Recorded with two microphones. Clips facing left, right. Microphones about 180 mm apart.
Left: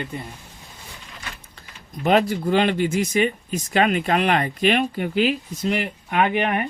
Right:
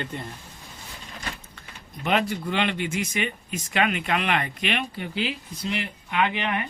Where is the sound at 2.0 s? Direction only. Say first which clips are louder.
Left 6 dB; 40° left (ahead or behind).